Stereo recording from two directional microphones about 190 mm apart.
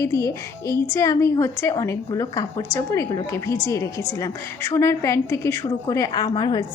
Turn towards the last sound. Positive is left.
turn(degrees=20)  # may be behind; listen again after turning